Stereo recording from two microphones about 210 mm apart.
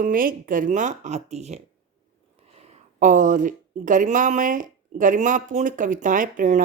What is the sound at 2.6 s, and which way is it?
Speech, 35° right (ahead or behind).